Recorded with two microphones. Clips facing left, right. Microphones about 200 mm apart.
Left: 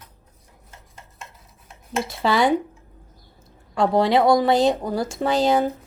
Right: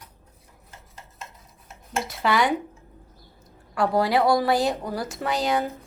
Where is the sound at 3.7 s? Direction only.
25° left (ahead or behind).